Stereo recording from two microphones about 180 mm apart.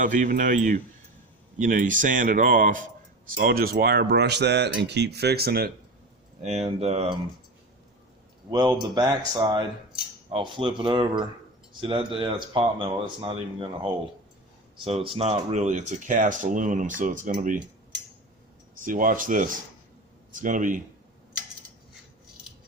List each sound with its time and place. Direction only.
0.0 s speech: 45° right (ahead or behind)
6.4 s speech: 40° right (ahead or behind)
8.4 s speech: 20° right (ahead or behind)
14.8 s speech: 30° right (ahead or behind)
18.8 s speech: 50° right (ahead or behind)